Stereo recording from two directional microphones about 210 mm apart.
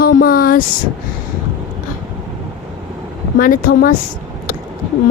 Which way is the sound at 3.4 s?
40° left (ahead or behind).